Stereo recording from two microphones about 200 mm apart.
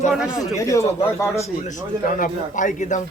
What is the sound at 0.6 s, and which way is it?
Speech, 15° left (ahead or behind).